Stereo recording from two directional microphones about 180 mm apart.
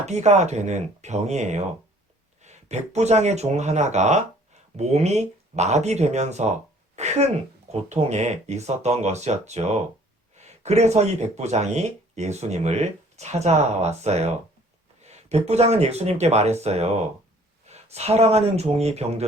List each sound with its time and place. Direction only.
0.0 s speech: 40° right (ahead or behind)
6.9 s a sound: 40° right (ahead or behind)
7.7 s speech: 40° right (ahead or behind)